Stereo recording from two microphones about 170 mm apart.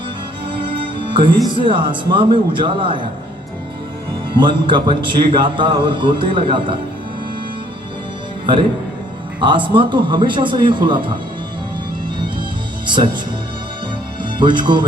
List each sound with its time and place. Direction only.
0.5 s music: 30° right (ahead or behind)
1.5 s a man's voice: 30° right (ahead or behind)
4.4 s a man's voice: 30° right (ahead or behind)
9.4 s a man's voice: 30° right (ahead or behind)
12.8 s music: 25° right (ahead or behind)
14.2 s speech: 30° right (ahead or behind)